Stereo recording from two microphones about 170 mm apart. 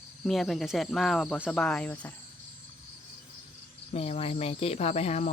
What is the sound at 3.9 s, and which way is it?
Speech, 35° left (ahead or behind).